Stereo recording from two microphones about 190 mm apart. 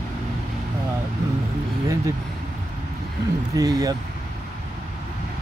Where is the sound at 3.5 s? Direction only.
20° right (ahead or behind).